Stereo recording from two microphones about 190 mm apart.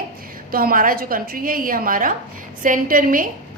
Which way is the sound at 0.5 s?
50° right (ahead or behind).